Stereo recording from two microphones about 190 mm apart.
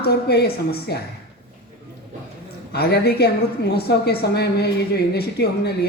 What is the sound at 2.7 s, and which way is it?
A man's voice, 55° left (ahead or behind).